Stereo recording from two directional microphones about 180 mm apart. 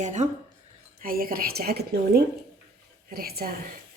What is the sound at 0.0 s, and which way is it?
Speech, 40° right (ahead or behind).